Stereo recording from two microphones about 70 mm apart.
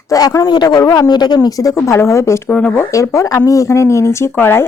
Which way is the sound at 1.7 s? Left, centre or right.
Left.